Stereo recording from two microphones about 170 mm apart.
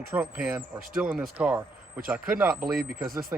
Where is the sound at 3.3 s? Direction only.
10° right (ahead or behind).